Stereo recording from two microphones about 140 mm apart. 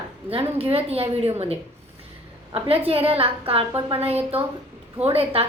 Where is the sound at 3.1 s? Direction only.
40° right (ahead or behind).